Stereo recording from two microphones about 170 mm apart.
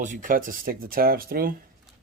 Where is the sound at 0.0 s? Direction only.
50° right (ahead or behind).